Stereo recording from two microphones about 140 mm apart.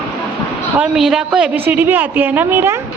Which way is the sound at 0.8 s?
5° right (ahead or behind).